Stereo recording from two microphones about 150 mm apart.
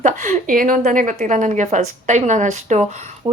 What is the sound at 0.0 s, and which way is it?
A woman's voice, 55° right (ahead or behind).